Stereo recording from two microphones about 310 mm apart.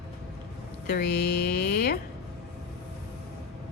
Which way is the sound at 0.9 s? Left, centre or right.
Left.